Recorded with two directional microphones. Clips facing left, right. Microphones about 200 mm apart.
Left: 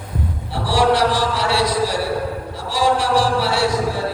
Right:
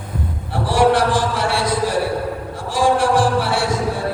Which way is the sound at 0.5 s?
50° right (ahead or behind).